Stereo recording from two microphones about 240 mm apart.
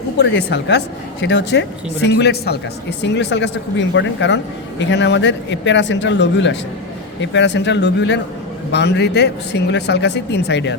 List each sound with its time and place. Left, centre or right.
0.2 s speech: left